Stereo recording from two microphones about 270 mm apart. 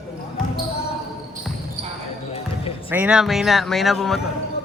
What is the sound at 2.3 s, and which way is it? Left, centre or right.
Basketball bounce, left.